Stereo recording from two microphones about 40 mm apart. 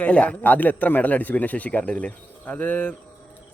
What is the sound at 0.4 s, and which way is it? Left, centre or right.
Speech, left.